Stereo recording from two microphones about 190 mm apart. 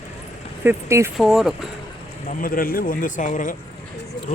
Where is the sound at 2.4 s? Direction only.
50° left (ahead or behind).